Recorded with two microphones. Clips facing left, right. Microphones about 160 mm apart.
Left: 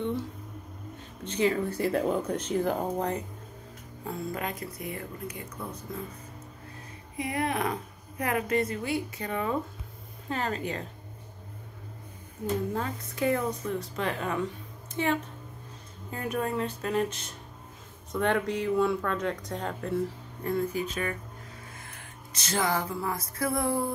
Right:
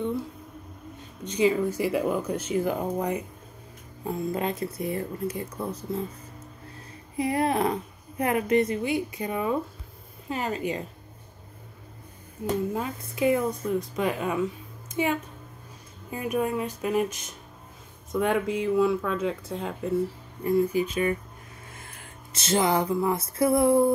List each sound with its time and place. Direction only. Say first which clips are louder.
1.2 s speech: right 4 dB; 15° right (ahead or behind)
4.0 s speech: right 5 dB; 20° right (ahead or behind)
7.2 s speech: right 5 dB; 30° right (ahead or behind); by 10.9 s 10° right (ahead or behind)
12.7 s speech: right 2 dB; 10° right (ahead or behind)
20.9 s speech: right 7 dB; 15° right (ahead or behind)
21.7 s music: right 1 dB; 25° right (ahead or behind)